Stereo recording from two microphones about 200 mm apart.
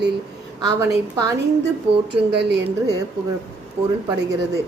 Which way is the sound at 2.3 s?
60° right (ahead or behind).